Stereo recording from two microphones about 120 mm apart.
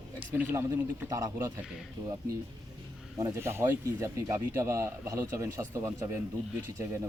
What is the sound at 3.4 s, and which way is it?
Speech, 20° right (ahead or behind).